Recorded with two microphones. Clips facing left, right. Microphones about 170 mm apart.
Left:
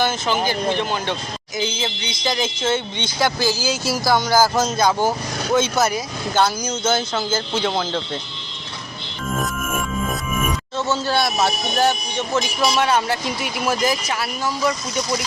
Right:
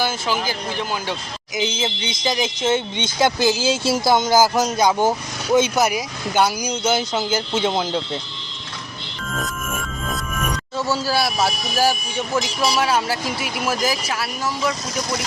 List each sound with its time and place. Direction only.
0.4 s speech: 5° right (ahead or behind)
1.5 s speech: 20° right (ahead or behind)
10.8 s speech: 10° right (ahead or behind)